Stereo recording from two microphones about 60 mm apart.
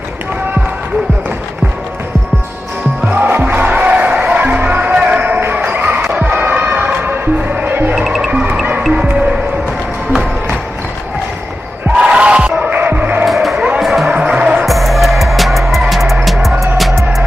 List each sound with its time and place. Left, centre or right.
3.1 s music: right
5.4 s basketball bounce: right
6.1 s music: right
7.9 s music: centre
8.3 s music: right
12.0 s battle cry: centre
12.7 s music: right
13.2 s music: centre
14.1 s music: centre
14.7 s music: centre